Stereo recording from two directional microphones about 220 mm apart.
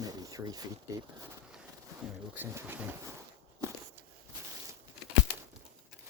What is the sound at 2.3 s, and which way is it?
Speech, 10° right (ahead or behind).